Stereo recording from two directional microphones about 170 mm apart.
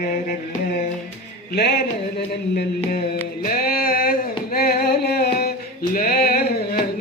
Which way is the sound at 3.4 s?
60° left (ahead or behind).